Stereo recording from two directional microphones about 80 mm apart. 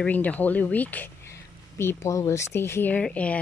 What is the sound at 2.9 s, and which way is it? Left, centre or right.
Speech, centre.